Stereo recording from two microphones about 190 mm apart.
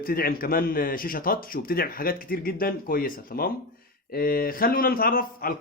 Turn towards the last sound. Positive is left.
turn(degrees=50)  # may be behind; listen again after turning